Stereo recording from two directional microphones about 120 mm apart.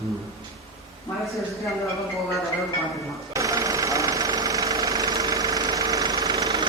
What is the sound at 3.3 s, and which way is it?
Engine, 25° right (ahead or behind).